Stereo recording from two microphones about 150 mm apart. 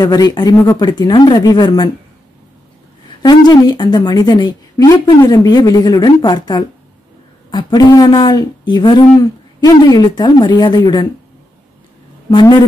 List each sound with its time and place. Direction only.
0.0 s a woman's voice: 25° left (ahead or behind)
3.2 s a woman's voice: 25° left (ahead or behind)
12.3 s a woman's voice: 25° left (ahead or behind)